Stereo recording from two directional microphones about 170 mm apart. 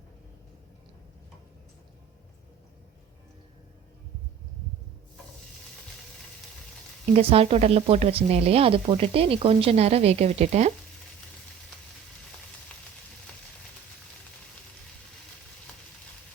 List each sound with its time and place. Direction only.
7.1 s speech: 35° right (ahead or behind)